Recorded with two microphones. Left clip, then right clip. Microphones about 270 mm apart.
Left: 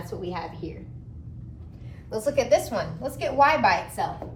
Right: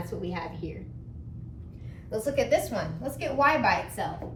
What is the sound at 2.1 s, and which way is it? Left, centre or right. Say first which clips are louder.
A woman's voice: left 4 dB; centre.